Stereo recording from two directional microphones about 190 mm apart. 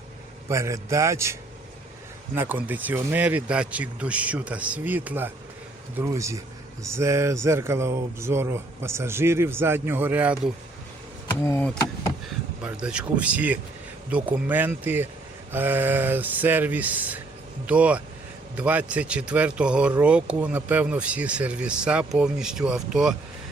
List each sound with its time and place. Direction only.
0.4 s speech: 15° right (ahead or behind)
11.4 s speech: 10° left (ahead or behind)
12.6 s speech: 5° right (ahead or behind)